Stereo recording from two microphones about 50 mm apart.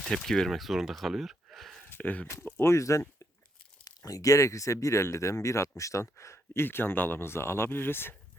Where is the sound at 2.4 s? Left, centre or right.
Left.